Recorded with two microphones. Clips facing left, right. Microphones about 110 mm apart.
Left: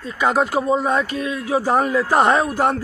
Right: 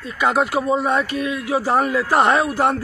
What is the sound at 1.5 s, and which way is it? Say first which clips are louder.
Dog: left 1 dB; 20° left (ahead or behind).